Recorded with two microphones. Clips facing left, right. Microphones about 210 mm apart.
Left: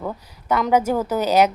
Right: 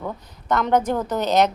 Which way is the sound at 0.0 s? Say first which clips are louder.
Left 2 dB; 5° left (ahead or behind).